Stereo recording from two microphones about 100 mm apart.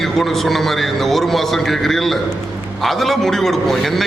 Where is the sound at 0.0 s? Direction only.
5° left (ahead or behind).